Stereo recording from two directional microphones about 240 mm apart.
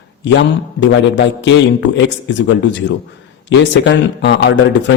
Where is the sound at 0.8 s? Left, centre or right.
Left.